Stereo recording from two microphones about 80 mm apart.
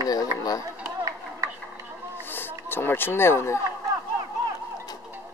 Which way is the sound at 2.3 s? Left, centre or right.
Left.